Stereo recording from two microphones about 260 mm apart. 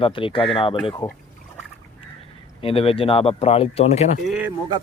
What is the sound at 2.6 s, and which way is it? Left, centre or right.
Speech, left.